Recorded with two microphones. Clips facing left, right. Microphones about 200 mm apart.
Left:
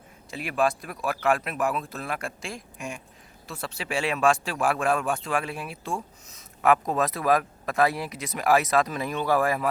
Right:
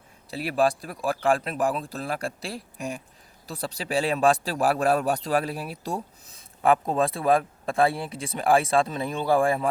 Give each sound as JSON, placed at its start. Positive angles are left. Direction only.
{"t": 0.3, "sound": "speech", "side_deg": -35}